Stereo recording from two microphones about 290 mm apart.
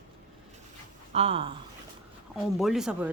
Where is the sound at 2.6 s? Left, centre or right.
Centre.